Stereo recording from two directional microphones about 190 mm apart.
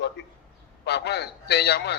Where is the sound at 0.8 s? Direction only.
60° left (ahead or behind).